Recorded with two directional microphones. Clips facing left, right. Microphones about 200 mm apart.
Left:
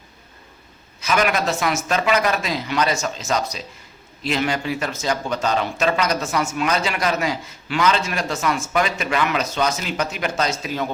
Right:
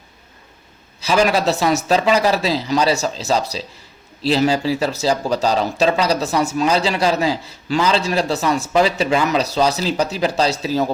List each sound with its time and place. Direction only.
1.0 s speech: 30° right (ahead or behind)